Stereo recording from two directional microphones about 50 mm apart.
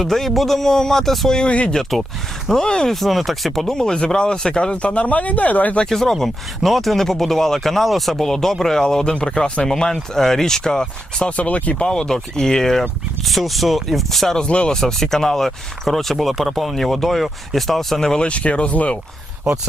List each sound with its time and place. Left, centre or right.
0.0 s speech: centre
1.4 s speech: left
1.7 s speech: centre; by 5.8 s left
5.9 s speech: centre
11.3 s speech: left; by 14.4 s centre
14.4 s speech: left
14.8 s speech: centre
18.2 s speech: left